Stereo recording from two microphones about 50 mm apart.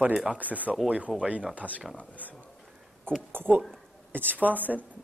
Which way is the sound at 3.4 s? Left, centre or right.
Right.